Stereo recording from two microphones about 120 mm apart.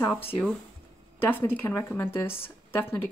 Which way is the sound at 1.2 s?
20° left (ahead or behind).